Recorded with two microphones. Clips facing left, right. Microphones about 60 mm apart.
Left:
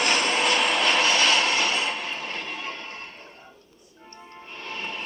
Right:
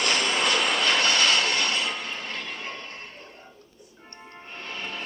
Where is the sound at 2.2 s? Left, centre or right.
Left.